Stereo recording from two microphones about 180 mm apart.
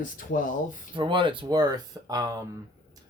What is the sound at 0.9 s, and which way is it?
Speech, 30° right (ahead or behind).